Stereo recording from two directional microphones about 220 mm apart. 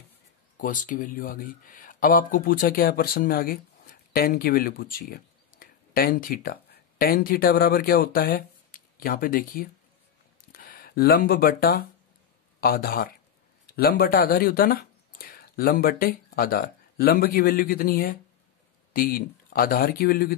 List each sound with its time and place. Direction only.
0.6 s speech: 35° left (ahead or behind)